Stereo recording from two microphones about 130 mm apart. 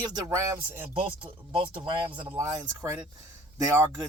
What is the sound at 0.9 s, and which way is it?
Speech, 45° right (ahead or behind).